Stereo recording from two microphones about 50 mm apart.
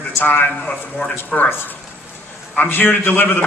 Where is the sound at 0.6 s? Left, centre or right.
Centre.